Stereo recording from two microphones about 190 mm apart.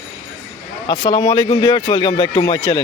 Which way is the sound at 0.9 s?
25° left (ahead or behind).